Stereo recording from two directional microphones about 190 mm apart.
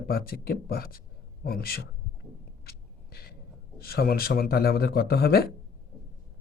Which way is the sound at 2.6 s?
55° left (ahead or behind).